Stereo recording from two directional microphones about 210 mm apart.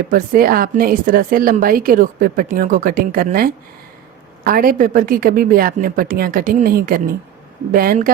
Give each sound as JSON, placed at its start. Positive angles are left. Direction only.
{"t": 0.1, "sound": "a woman's voice", "side_deg": -40}